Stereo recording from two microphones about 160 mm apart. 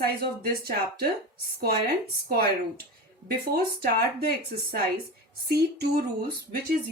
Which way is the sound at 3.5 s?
70° right (ahead or behind).